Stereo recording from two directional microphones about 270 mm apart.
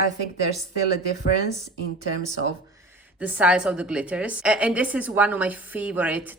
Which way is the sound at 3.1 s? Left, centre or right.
Centre.